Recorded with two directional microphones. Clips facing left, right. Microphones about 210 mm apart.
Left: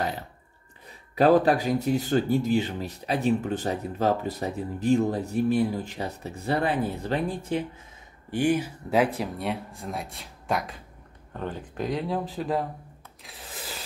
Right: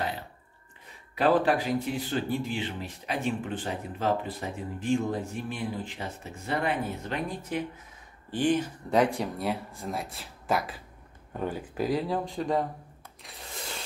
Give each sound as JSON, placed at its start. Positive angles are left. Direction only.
{"t": 1.1, "sound": "speech", "side_deg": 40}
{"t": 8.3, "sound": "speech", "side_deg": 10}
{"t": 13.2, "sound": "a sound", "side_deg": 0}